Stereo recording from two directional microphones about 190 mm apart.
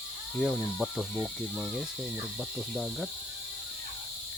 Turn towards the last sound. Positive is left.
turn(degrees=0)  # may be behind; listen again after turning